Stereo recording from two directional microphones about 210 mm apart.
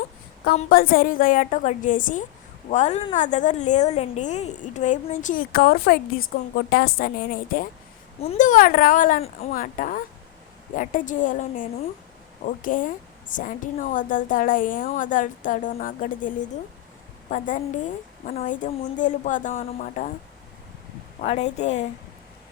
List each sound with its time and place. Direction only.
0.7 s a woman's voice: 45° left (ahead or behind)
8.3 s a woman's voice: 35° left (ahead or behind)
21.2 s a woman's voice: 35° left (ahead or behind)